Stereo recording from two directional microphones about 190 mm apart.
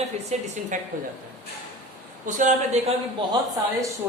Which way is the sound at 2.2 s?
40° right (ahead or behind).